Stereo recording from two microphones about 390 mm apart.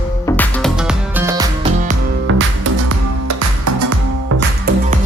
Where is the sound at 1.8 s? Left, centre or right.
Right.